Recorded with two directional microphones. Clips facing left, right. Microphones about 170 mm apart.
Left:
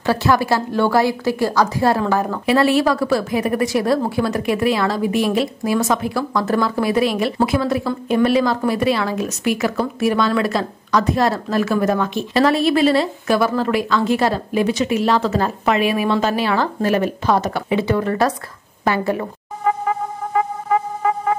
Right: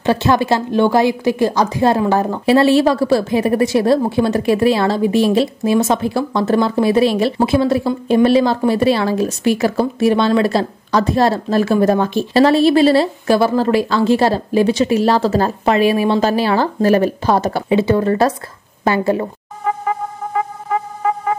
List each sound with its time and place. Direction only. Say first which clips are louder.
0.0 s a woman's voice: right 2 dB; 20° right (ahead or behind)